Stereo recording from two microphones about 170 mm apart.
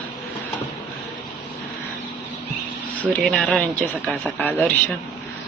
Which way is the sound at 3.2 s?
5° left (ahead or behind).